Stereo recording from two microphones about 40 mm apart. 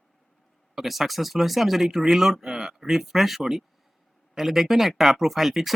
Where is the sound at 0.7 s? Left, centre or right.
Centre.